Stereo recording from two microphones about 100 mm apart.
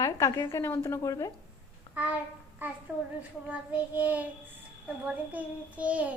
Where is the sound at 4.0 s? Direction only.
15° right (ahead or behind).